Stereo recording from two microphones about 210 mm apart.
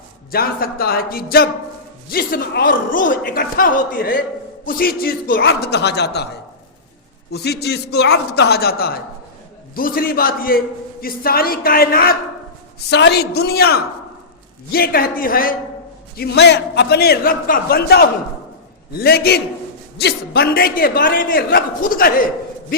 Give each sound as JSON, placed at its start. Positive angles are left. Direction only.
{"t": 0.3, "sound": "speech", "side_deg": 45}
{"t": 7.3, "sound": "speech", "side_deg": 50}